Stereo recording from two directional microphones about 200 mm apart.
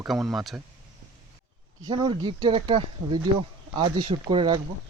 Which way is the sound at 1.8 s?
25° right (ahead or behind).